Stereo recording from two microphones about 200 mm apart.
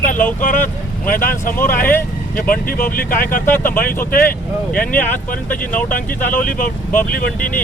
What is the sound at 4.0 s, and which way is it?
Speech, 45° left (ahead or behind).